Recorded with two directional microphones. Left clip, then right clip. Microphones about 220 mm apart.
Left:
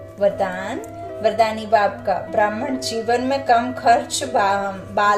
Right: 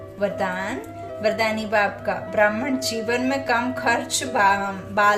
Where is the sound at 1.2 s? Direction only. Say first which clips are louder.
Left 4 dB; 15° right (ahead or behind).